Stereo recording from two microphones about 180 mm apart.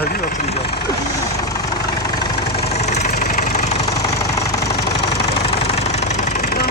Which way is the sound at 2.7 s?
40° left (ahead or behind).